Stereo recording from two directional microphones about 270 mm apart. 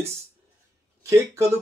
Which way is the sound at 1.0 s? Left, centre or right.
Centre.